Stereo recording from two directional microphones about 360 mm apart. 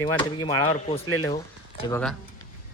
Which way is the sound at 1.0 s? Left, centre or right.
Left.